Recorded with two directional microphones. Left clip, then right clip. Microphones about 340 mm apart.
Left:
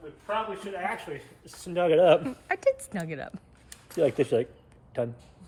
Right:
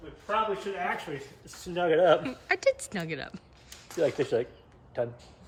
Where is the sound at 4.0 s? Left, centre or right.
Centre.